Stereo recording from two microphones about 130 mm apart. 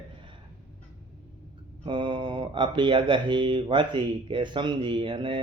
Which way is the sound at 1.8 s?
40° right (ahead or behind).